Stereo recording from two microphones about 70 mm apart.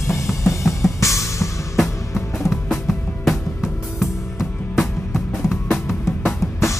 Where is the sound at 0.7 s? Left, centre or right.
Centre.